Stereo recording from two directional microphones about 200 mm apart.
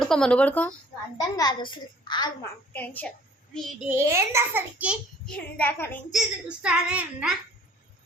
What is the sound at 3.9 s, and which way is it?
A child's voice, 15° right (ahead or behind).